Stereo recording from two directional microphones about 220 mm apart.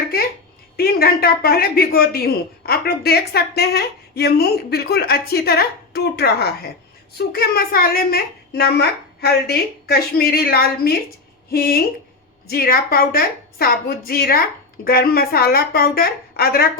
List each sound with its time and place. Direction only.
0.8 s speech: 45° left (ahead or behind)